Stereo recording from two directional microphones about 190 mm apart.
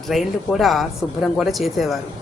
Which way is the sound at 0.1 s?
Centre (ahead or behind).